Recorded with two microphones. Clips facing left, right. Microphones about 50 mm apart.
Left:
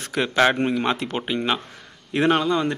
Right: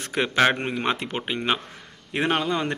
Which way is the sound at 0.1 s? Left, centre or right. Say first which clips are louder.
Left 1 dB; right.